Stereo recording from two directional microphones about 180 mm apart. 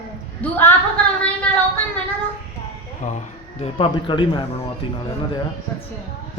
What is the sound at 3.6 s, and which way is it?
Speech, 30° left (ahead or behind).